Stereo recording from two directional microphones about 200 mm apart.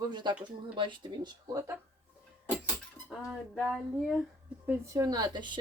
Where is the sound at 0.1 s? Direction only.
20° right (ahead or behind).